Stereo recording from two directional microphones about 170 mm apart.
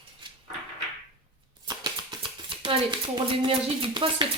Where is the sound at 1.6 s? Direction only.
25° right (ahead or behind).